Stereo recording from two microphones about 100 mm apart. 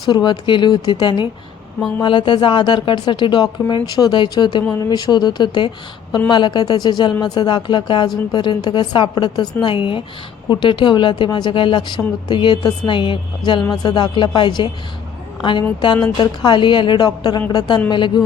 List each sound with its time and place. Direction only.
0.0 s a woman's voice: 50° left (ahead or behind)
16.1 s a woman's voice: 50° left (ahead or behind)